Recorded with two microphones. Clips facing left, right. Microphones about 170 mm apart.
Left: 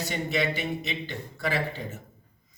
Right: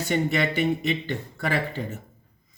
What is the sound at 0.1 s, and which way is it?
A man's voice, 50° right (ahead or behind).